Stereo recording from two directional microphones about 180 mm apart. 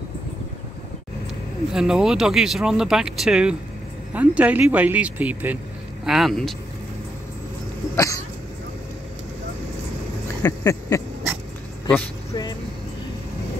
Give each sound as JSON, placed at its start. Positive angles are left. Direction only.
{"t": 1.7, "sound": "speech", "side_deg": -5}
{"t": 7.9, "sound": "dog", "side_deg": 15}
{"t": 10.4, "sound": "a sound", "side_deg": 20}
{"t": 11.9, "sound": "vehicle", "side_deg": 20}